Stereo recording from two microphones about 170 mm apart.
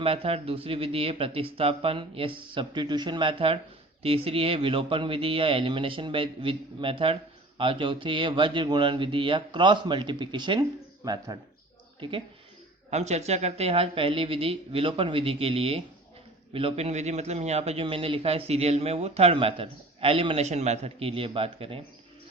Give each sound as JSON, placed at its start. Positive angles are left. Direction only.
{"t": 0.0, "sound": "a man's voice", "side_deg": -35}
{"t": 12.9, "sound": "a man's voice", "side_deg": -40}